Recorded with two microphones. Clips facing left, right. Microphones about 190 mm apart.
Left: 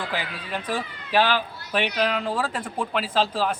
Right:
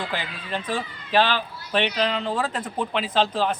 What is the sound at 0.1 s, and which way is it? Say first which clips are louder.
A man's voice: even; 10° left (ahead or behind).